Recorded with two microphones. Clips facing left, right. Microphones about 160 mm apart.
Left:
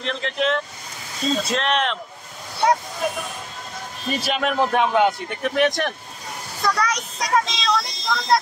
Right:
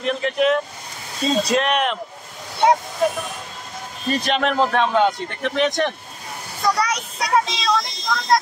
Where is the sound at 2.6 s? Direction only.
20° right (ahead or behind).